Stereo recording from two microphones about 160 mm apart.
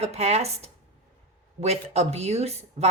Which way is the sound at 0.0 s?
40° right (ahead or behind).